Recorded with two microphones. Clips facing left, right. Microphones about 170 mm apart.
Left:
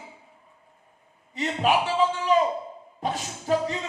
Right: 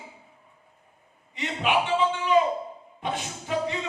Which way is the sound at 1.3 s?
40° left (ahead or behind).